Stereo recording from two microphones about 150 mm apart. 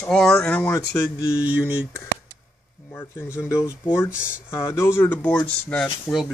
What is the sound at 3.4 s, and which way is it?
Speech, 20° left (ahead or behind).